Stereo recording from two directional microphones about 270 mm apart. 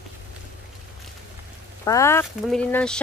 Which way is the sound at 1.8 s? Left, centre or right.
Centre.